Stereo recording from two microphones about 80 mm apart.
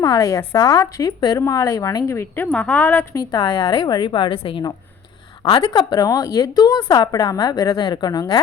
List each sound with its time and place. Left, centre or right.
0.2 s a woman's voice: left
2.5 s a woman's voice: centre
3.2 s a woman's voice: left
5.5 s a woman's voice: left